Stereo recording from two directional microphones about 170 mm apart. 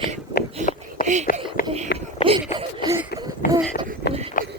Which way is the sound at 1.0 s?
45° right (ahead or behind).